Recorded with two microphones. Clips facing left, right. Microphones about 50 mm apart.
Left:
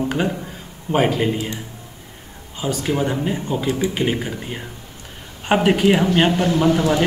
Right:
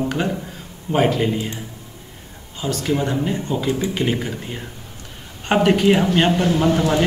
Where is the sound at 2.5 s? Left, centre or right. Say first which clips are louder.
Even; centre.